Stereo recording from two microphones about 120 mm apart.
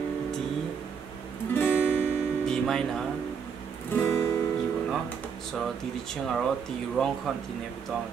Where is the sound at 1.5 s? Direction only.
15° left (ahead or behind).